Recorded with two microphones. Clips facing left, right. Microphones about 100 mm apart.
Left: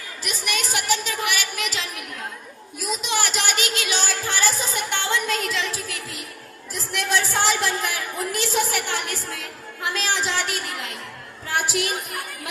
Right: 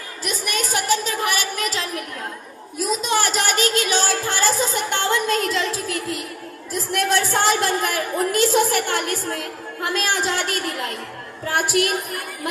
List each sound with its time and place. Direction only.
0.3 s a sound: 40° right (ahead or behind)
2.7 s music: 40° right (ahead or behind)
6.9 s a woman's voice: 45° right (ahead or behind)